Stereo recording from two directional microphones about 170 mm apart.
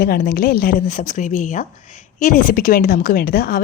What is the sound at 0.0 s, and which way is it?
A woman's voice, 60° left (ahead or behind).